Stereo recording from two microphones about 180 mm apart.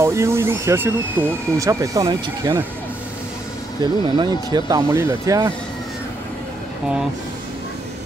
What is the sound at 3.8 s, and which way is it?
Speech, 20° right (ahead or behind).